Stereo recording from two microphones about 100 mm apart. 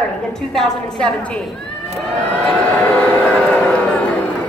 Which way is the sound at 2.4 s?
15° left (ahead or behind).